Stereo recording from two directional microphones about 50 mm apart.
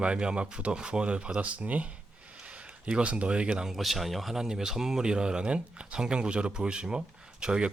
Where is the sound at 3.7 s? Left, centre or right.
Centre.